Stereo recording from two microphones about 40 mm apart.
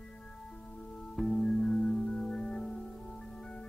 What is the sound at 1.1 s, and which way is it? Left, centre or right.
Music, centre.